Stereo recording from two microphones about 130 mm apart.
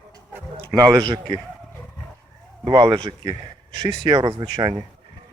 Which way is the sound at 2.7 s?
40° right (ahead or behind).